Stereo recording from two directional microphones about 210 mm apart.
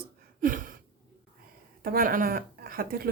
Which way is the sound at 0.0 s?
40° right (ahead or behind).